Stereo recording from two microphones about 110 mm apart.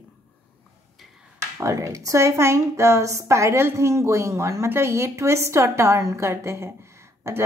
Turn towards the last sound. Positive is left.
turn(degrees=-25)  # may be behind; listen again after turning